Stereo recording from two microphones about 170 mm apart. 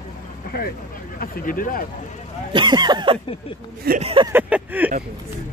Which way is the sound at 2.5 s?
25° right (ahead or behind).